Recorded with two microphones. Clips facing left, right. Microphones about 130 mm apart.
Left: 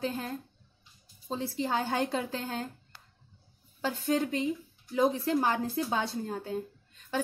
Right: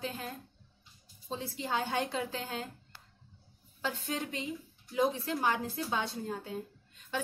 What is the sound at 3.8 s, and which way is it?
A woman's voice, 40° left (ahead or behind).